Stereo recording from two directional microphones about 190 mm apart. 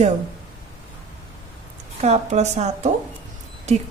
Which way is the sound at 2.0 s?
35° right (ahead or behind).